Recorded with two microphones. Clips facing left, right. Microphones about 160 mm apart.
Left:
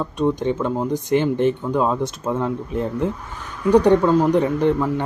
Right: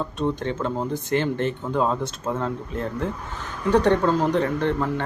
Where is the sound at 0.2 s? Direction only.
15° left (ahead or behind).